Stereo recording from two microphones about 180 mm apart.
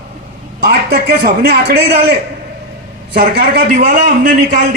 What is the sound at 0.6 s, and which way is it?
A man's voice, 60° right (ahead or behind).